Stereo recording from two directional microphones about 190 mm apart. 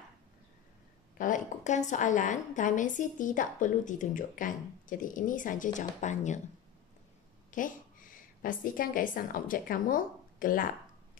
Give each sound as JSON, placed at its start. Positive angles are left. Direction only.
{"t": 1.1, "sound": "a woman's voice", "side_deg": 45}
{"t": 7.5, "sound": "a woman's voice", "side_deg": 45}